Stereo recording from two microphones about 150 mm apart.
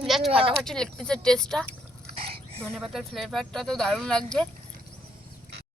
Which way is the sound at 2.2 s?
40° right (ahead or behind).